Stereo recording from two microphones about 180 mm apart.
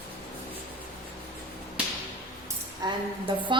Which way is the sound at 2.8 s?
25° right (ahead or behind).